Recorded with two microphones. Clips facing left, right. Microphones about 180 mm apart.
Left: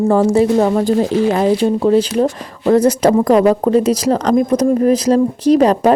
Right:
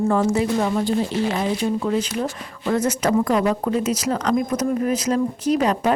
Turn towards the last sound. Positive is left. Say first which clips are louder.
# left 8 dB
turn(degrees=35)  # may be behind; listen again after turning